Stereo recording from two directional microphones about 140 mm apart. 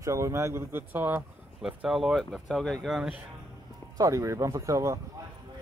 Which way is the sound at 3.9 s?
25° right (ahead or behind).